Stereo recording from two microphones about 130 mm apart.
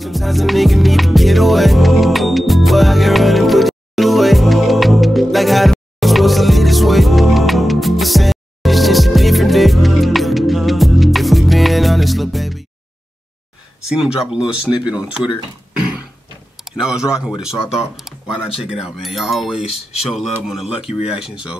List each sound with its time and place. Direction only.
0.0 s music: centre (ahead or behind)
13.8 s speech: 5° right (ahead or behind)
16.6 s speech: 5° right (ahead or behind)
19.8 s speech: 55° left (ahead or behind)
20.1 s speech: centre (ahead or behind)